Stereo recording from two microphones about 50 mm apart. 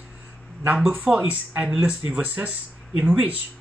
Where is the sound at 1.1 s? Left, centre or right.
Right.